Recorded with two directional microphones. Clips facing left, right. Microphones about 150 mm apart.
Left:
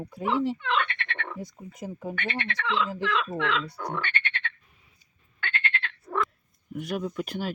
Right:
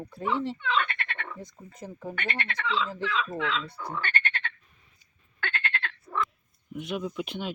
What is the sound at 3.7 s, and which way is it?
Frog, 80° left.